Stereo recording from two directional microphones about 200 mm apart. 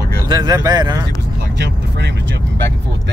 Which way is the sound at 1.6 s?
60° right (ahead or behind).